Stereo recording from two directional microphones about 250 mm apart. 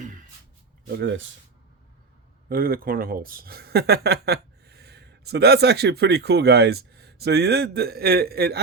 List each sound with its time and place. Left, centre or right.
0.9 s speech: right
2.5 s speech: right